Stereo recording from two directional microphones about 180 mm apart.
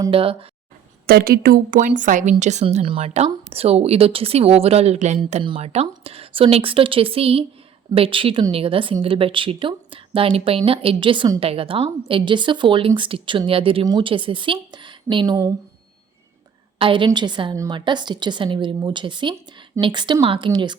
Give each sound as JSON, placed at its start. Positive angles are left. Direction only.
{"t": 0.1, "sound": "a woman's voice", "side_deg": -30}
{"t": 1.0, "sound": "a woman's voice", "side_deg": -55}
{"t": 16.7, "sound": "a woman's voice", "side_deg": -30}